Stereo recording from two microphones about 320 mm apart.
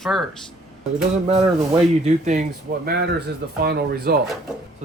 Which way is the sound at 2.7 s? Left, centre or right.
Right.